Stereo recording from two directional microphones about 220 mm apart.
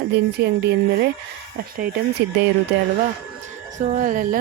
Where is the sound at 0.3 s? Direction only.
50° right (ahead or behind).